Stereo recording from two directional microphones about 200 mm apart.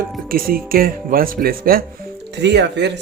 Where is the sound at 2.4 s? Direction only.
60° right (ahead or behind).